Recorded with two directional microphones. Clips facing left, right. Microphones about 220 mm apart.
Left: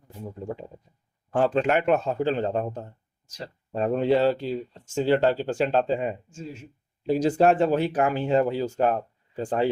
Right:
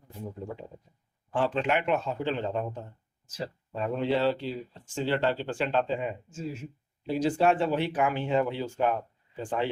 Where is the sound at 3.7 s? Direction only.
45° left (ahead or behind).